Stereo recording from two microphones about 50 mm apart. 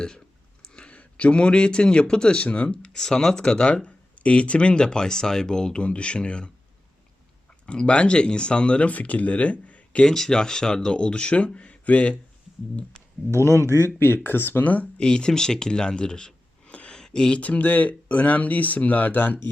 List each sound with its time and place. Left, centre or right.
0.6 s speech: centre
2.9 s speech: centre
7.7 s speech: left
13.3 s speech: right
14.3 s speech: left
14.6 s speech: left
14.9 s speech: centre
16.9 s a sound: centre
17.4 s speech: left